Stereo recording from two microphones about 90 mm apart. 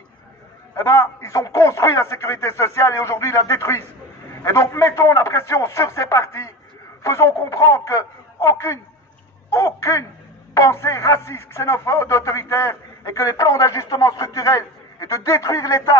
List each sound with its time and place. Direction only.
0.7 s a man's voice: 30° left (ahead or behind)